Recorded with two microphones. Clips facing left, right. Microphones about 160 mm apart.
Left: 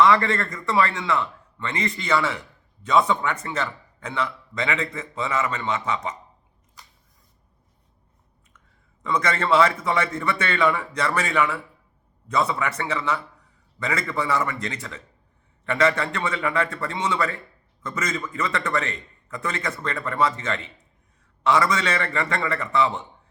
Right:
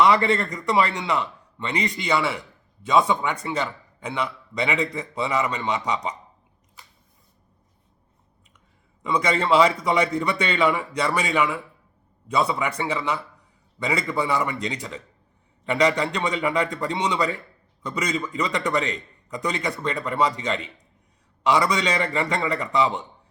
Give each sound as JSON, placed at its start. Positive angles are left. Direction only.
{"t": 0.0, "sound": "a man's voice", "side_deg": -15}
{"t": 9.0, "sound": "a man's voice", "side_deg": -10}